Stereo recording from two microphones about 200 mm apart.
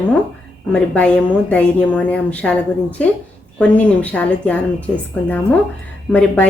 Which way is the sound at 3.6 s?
5° left (ahead or behind).